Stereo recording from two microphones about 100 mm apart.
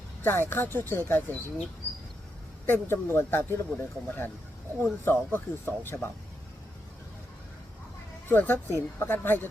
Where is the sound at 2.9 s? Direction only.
20° left (ahead or behind).